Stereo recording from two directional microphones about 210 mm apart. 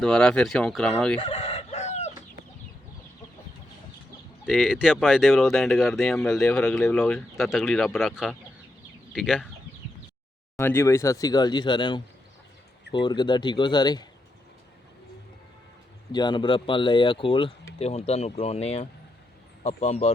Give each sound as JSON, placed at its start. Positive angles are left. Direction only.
{"t": 0.0, "sound": "speech", "side_deg": 5}
{"t": 1.2, "sound": "chicken", "side_deg": 30}
{"t": 4.4, "sound": "speech", "side_deg": -5}
{"t": 10.6, "sound": "speech", "side_deg": 10}
{"t": 16.1, "sound": "speech", "side_deg": 20}